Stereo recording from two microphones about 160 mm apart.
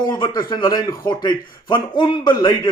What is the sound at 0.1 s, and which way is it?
Speech, 25° left (ahead or behind).